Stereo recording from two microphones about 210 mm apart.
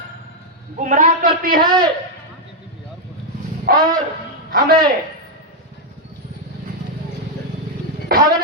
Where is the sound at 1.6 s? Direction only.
20° right (ahead or behind).